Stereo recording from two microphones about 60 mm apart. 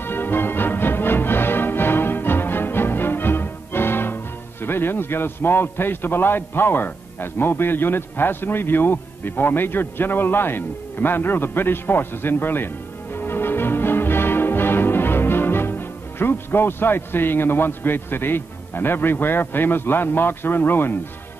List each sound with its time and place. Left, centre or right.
0.0 s music: left